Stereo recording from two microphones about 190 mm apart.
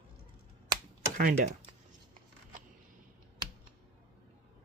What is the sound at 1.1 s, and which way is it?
Speech, 45° right (ahead or behind).